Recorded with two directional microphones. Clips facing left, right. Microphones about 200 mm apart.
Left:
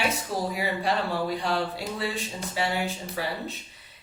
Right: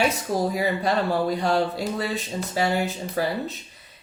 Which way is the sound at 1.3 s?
45° right (ahead or behind).